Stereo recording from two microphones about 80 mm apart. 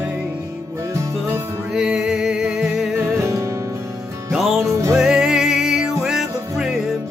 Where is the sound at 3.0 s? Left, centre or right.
Right.